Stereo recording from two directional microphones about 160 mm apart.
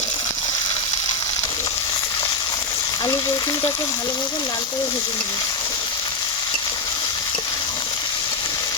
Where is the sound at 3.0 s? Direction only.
25° left (ahead or behind).